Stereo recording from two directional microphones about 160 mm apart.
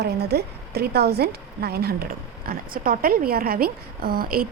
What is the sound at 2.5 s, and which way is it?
A woman's voice, 65° right (ahead or behind).